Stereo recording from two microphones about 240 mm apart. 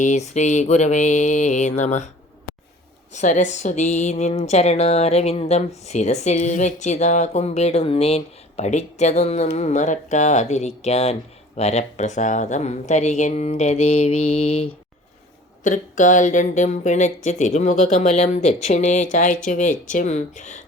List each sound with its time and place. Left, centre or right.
0.0 s speech: left
3.1 s speech: left